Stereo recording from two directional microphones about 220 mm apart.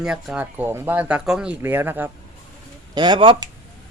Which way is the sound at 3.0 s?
20° right (ahead or behind).